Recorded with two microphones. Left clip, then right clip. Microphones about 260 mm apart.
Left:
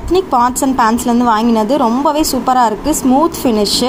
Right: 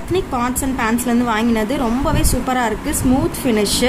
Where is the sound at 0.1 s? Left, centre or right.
Centre.